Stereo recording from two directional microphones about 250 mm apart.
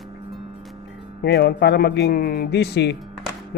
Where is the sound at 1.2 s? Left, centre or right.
Left.